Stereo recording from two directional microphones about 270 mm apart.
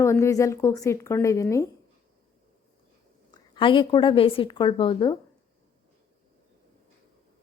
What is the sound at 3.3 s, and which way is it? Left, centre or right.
A woman's voice, centre.